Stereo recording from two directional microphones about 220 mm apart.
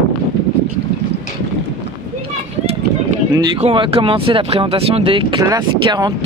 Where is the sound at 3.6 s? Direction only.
25° right (ahead or behind).